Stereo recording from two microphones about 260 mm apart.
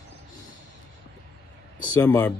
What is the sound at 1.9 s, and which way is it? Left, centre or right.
Speech, centre.